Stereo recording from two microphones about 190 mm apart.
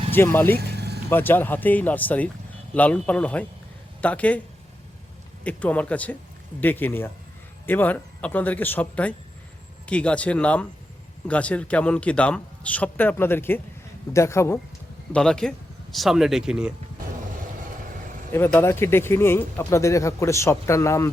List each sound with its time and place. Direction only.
0.1 s speech: 10° left (ahead or behind)
0.5 s vehicle: 60° right (ahead or behind)
1.1 s speech: 10° left (ahead or behind)
5.4 s speech: 5° left (ahead or behind)
15.1 s speech: 5° left (ahead or behind)
18.3 s speech: 10° left (ahead or behind)